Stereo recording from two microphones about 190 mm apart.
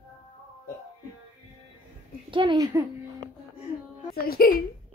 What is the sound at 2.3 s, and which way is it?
Speech, 25° right (ahead or behind).